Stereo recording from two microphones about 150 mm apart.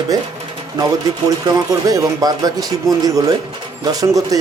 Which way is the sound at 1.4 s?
25° right (ahead or behind).